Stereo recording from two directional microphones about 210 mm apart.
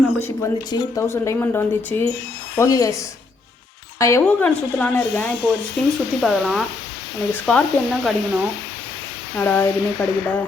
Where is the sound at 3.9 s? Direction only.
15° left (ahead or behind).